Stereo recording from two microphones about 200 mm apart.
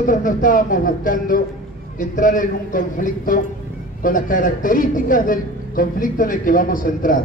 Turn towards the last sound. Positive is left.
turn(degrees=45)  # may be behind; listen again after turning